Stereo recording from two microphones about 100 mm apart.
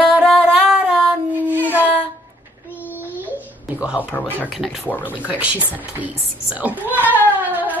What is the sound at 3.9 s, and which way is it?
Speech, 20° left (ahead or behind).